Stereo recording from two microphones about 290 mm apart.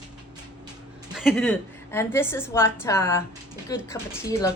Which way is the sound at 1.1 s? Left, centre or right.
Centre.